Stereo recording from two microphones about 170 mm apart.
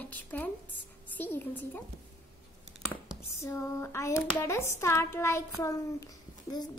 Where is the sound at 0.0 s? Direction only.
10° left (ahead or behind).